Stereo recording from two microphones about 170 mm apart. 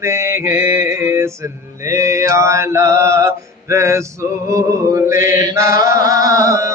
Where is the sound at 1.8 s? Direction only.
20° right (ahead or behind).